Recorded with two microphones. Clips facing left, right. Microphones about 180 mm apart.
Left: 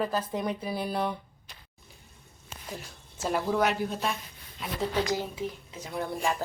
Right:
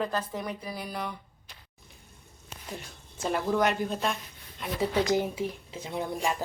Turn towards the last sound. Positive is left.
turn(degrees=-15)  # may be behind; listen again after turning